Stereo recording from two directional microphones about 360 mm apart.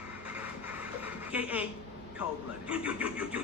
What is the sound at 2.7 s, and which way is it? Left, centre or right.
Vehicle, centre.